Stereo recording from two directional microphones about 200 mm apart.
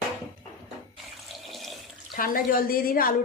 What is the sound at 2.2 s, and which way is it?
Speech, 45° left (ahead or behind).